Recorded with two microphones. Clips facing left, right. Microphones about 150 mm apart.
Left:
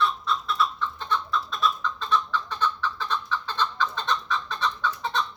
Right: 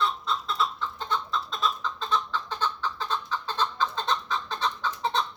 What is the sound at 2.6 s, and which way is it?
Chicken, 30° right (ahead or behind).